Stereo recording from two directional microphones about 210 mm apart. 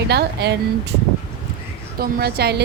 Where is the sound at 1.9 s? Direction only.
45° right (ahead or behind).